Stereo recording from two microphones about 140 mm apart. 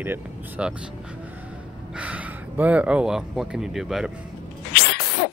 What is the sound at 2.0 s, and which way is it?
Speech, 10° right (ahead or behind).